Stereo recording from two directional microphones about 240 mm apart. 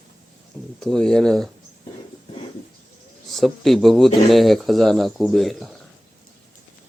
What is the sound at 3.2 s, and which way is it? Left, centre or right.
Speech, centre.